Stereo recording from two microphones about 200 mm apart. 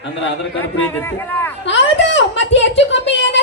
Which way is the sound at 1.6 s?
65° left (ahead or behind).